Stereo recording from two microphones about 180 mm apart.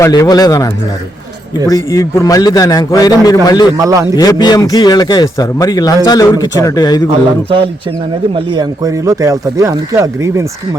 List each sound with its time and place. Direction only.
0.0 s speech: 20° left (ahead or behind)
3.8 s speech: 20° right (ahead or behind)
4.1 s speech: 20° left (ahead or behind)
8.4 s speech: 20° right (ahead or behind)